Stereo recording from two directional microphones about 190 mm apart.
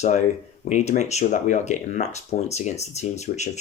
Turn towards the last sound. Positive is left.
turn(degrees=35)  # may be behind; listen again after turning